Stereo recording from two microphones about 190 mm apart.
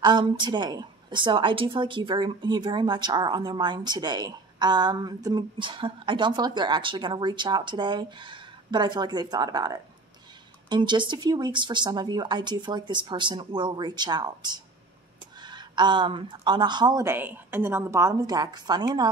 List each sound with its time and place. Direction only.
0.0 s a woman's voice: 25° right (ahead or behind)